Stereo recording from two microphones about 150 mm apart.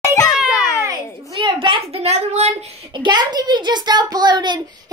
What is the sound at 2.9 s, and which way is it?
A child's voice, 30° right (ahead or behind).